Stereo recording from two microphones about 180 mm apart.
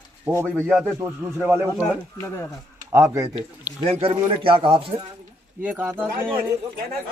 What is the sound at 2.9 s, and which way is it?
Speech, 15° right (ahead or behind).